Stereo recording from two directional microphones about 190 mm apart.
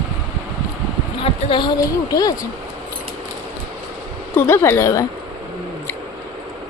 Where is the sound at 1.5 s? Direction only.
25° left (ahead or behind).